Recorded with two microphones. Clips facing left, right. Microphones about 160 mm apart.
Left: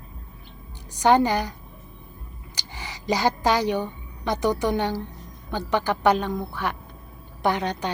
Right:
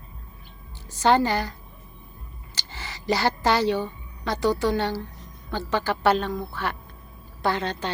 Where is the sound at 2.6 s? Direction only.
15° left (ahead or behind).